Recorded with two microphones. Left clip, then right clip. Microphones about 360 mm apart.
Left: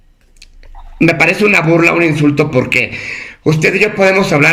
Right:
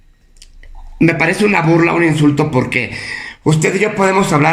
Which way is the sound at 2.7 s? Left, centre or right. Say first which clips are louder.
Left 4 dB; left.